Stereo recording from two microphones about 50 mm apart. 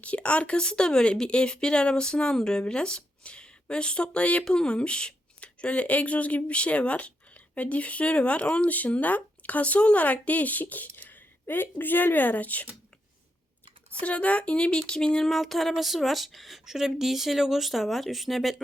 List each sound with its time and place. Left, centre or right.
0.0 s speech: left
14.0 s speech: left
15.3 s speech: centre